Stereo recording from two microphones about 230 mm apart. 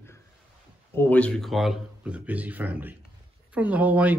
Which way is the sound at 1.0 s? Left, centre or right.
Centre.